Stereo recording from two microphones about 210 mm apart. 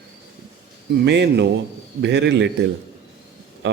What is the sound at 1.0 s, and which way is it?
Speech, 55° right (ahead or behind).